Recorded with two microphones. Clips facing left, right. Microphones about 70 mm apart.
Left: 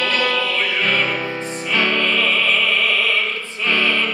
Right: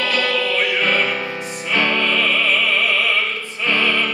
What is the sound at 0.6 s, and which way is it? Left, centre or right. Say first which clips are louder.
Music: right 1 dB; centre.